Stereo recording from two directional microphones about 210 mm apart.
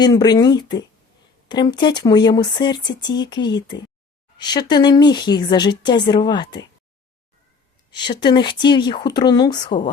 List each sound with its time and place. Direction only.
0.0 s speech: 20° left (ahead or behind)
7.9 s speech: 20° left (ahead or behind)